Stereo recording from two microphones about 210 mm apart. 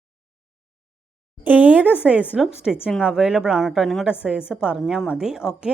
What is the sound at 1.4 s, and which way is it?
A woman's voice, 5° right (ahead or behind).